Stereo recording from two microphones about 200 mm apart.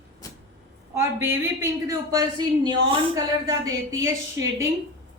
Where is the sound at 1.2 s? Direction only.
10° right (ahead or behind).